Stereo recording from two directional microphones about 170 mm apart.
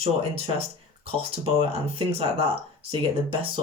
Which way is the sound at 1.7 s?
35° right (ahead or behind).